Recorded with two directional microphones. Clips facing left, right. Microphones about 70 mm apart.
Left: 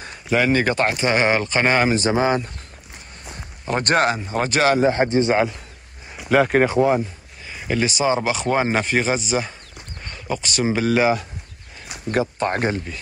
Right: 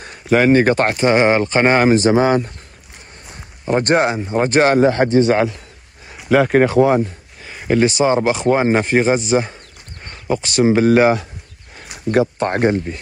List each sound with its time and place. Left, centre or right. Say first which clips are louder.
0.0 s a sound: right 5 dB; right
0.5 s speech: right 6 dB; right
1.1 s speech: right 6 dB; right
3.6 s speech: right 4 dB; right
4.4 s speech: right 5 dB; right
4.7 s speech: right 5 dB; right
6.2 s speech: right 3 dB; right
7.4 s speech: right 7 dB; right
8.5 s speech: right 5 dB; right
12.1 s speech: right 5 dB; right